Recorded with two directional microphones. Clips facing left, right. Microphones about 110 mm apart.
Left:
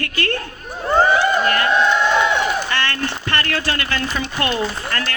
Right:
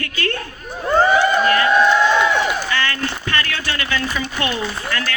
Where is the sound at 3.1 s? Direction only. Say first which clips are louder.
Left 1 dB; 45° left (ahead or behind).